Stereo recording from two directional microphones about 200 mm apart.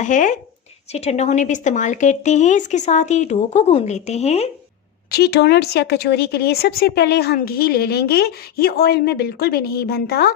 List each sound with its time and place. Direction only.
0.0 s a woman's voice: 40° left (ahead or behind)
5.1 s speech: 55° left (ahead or behind)